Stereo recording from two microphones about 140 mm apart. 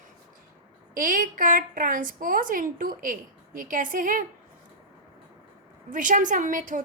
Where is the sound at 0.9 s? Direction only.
75° right (ahead or behind).